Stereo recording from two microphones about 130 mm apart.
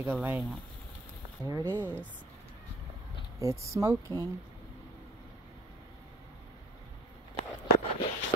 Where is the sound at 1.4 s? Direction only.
30° right (ahead or behind).